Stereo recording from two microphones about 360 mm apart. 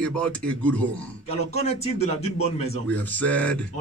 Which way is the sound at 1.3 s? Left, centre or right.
Centre.